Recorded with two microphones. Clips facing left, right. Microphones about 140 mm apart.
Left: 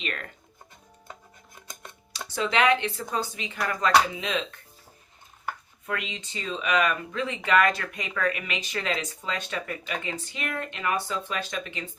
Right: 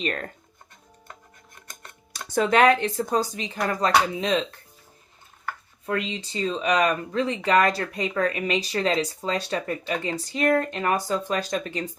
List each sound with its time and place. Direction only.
0.0 s speech: 40° right (ahead or behind)
2.2 s speech: 50° right (ahead or behind)
5.5 s a sound: 15° left (ahead or behind)
5.8 s speech: 35° right (ahead or behind)